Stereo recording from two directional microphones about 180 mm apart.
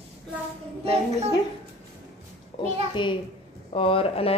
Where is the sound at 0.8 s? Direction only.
35° right (ahead or behind).